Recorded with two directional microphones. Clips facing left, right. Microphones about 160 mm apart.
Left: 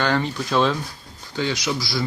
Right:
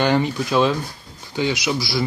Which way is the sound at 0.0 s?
15° right (ahead or behind).